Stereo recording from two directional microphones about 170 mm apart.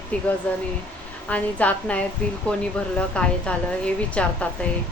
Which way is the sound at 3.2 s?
5° left (ahead or behind).